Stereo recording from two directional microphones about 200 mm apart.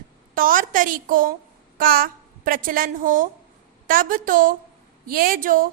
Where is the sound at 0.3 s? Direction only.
45° right (ahead or behind).